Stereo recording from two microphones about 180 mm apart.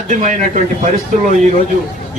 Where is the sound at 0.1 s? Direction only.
45° right (ahead or behind).